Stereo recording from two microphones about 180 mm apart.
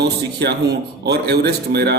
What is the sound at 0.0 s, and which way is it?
Speech, 70° right (ahead or behind).